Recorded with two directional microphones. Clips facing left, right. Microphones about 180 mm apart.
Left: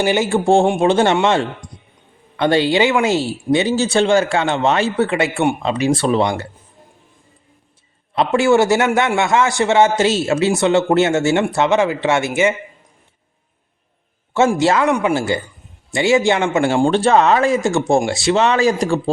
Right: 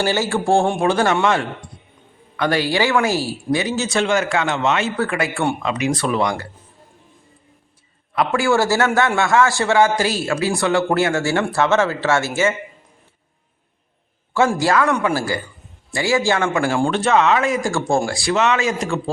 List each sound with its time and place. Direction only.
0.0 s a man's voice: 15° left (ahead or behind)
8.1 s a man's voice: 25° left (ahead or behind)
14.3 s a man's voice: 25° left (ahead or behind)